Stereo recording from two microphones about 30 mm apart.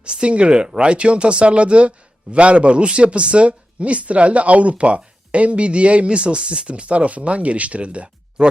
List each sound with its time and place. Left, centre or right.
0.0 s speech: right
6.4 s speech: right
6.7 s speech: right